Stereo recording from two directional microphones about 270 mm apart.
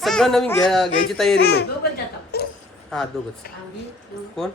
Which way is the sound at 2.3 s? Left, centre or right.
Left.